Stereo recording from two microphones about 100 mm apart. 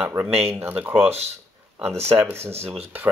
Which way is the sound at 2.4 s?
90° right.